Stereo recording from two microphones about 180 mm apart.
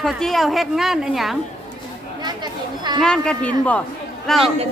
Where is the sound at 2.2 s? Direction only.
25° right (ahead or behind).